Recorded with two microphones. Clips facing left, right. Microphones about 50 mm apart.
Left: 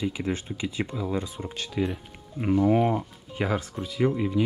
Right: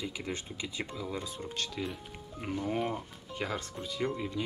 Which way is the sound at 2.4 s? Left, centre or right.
Left.